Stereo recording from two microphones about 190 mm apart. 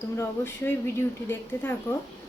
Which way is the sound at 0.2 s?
15° left (ahead or behind).